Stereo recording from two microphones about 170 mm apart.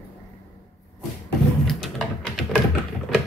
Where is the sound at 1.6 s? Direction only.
Centre (ahead or behind).